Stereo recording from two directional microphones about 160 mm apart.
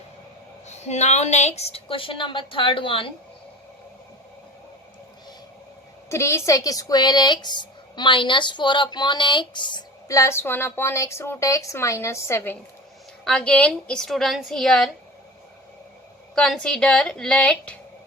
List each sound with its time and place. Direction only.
0.7 s a woman's voice: 45° left (ahead or behind)
6.1 s a woman's voice: 15° left (ahead or behind)
13.2 s a woman's voice: 5° left (ahead or behind)
16.3 s a woman's voice: 5° left (ahead or behind)